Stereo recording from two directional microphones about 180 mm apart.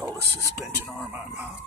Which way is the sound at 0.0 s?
20° right (ahead or behind).